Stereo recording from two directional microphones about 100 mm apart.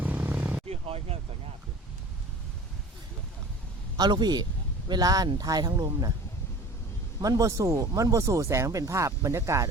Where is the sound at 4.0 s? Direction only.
45° right (ahead or behind).